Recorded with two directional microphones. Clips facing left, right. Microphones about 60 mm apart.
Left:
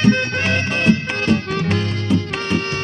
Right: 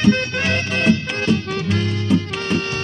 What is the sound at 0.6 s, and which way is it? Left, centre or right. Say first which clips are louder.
Music: even; left.